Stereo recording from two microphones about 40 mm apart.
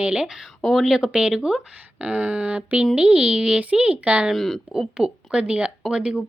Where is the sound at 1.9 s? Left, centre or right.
Right.